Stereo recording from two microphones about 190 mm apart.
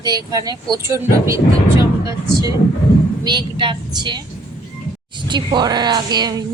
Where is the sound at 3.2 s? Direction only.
25° right (ahead or behind).